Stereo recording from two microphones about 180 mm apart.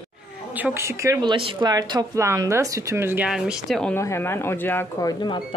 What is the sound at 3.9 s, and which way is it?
Speech, 15° left (ahead or behind).